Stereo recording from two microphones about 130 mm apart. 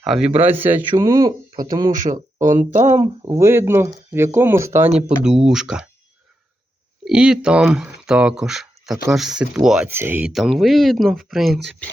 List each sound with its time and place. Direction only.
0.0 s speech: 5° right (ahead or behind)
1.0 s speech: 30° right (ahead or behind)
2.4 s speech: 80° right
2.8 s speech: 20° right (ahead or behind)
4.9 s speech: 5° right (ahead or behind)
7.0 s speech: 5° right (ahead or behind)
9.9 s speech: 15° right (ahead or behind)
10.3 s speech: centre (ahead or behind)